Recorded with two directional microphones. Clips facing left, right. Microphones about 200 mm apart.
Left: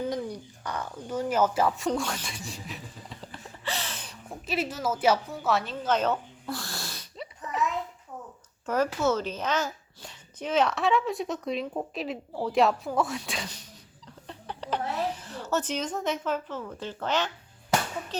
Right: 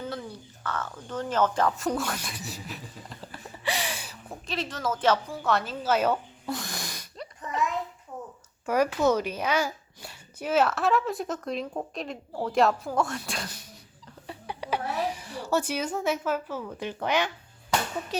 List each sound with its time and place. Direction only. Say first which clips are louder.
0.1 s speech: left 5 dB; 15° left (ahead or behind)
1.9 s a woman's voice: even; 10° right (ahead or behind)
3.6 s a sound: right 4 dB; 15° right (ahead or behind)
4.4 s a woman's voice: left 2 dB; 10° left (ahead or behind); by 7.1 s 15° right (ahead or behind)
8.6 s a woman's voice: right 2 dB; 10° right (ahead or behind)
14.3 s a sound: right 1 dB; 10° right (ahead or behind)